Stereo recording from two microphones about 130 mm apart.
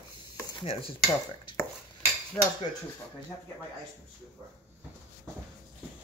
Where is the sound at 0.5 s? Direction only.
45° left (ahead or behind).